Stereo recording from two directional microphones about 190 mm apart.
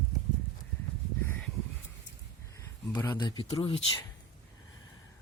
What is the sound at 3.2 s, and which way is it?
Speech, 25° left (ahead or behind).